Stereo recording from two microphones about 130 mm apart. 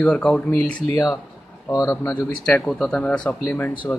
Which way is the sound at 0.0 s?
5° left (ahead or behind).